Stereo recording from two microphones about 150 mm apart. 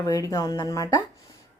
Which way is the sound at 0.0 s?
20° left (ahead or behind).